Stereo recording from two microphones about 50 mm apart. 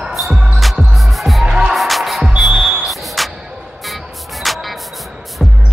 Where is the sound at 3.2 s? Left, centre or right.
Centre.